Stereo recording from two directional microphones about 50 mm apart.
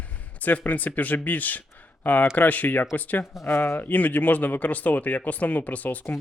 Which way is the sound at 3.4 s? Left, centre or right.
Left.